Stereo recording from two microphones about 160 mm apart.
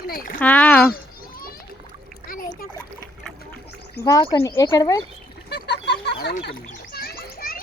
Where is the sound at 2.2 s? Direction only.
60° left (ahead or behind).